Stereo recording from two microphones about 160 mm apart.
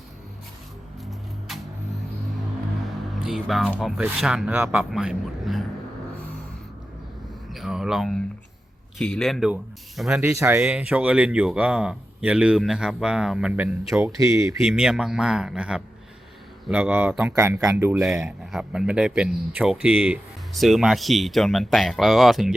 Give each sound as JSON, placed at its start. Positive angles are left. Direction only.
{"t": 3.2, "sound": "speech", "side_deg": 0}
{"t": 7.5, "sound": "speech", "side_deg": 0}
{"t": 14.0, "sound": "speech", "side_deg": -20}
{"t": 14.6, "sound": "speech", "side_deg": 0}
{"t": 18.2, "sound": "speech", "side_deg": -5}